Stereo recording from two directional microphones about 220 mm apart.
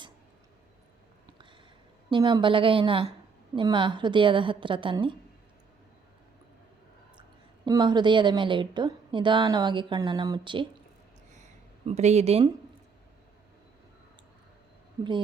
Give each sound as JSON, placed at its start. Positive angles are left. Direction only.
{"t": 2.0, "sound": "a woman's voice", "side_deg": -20}
{"t": 7.2, "sound": "a woman's voice", "side_deg": -20}
{"t": 11.9, "sound": "a woman's voice", "side_deg": -30}